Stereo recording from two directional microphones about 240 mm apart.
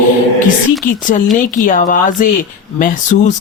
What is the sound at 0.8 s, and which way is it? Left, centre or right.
Speech, left.